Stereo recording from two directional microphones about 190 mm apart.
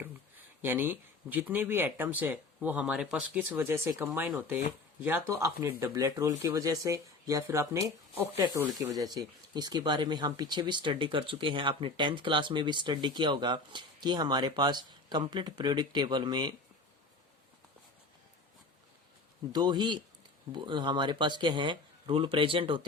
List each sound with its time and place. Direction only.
0.6 s speech: 10° right (ahead or behind)
19.5 s speech: 25° right (ahead or behind)